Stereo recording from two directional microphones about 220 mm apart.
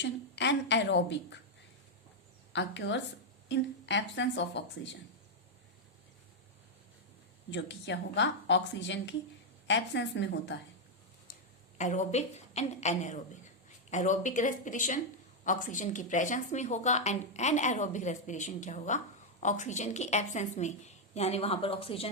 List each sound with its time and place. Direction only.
0.0 s a woman's voice: 55° left (ahead or behind)
2.5 s a woman's voice: 55° left (ahead or behind)
7.5 s a woman's voice: 55° left (ahead or behind)
11.8 s a woman's voice: 35° left (ahead or behind)